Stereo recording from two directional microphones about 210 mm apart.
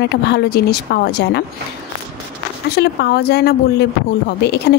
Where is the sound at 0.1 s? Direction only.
50° left (ahead or behind).